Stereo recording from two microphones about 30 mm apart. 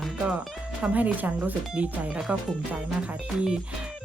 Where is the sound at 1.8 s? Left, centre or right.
Right.